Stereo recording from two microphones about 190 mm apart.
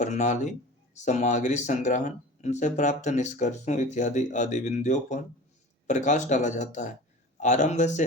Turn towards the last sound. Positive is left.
turn(degrees=40)  # may be behind; listen again after turning